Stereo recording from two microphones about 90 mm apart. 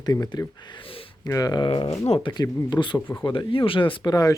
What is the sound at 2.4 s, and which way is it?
Speech, 55° left (ahead or behind).